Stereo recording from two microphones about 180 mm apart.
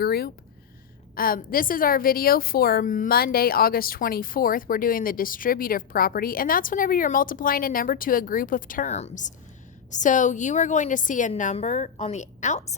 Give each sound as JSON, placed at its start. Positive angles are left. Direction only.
{"t": 0.0, "sound": "a woman's voice", "side_deg": 60}